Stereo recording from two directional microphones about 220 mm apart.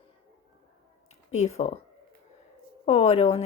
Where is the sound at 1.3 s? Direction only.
30° left (ahead or behind).